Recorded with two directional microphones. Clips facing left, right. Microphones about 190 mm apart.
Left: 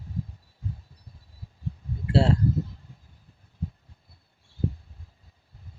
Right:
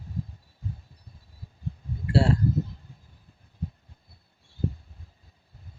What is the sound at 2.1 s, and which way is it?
Speech, 25° left (ahead or behind).